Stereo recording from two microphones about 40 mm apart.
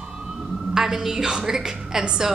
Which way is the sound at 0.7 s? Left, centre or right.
Centre.